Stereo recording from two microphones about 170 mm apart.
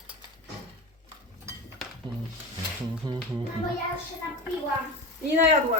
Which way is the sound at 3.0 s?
25° right (ahead or behind).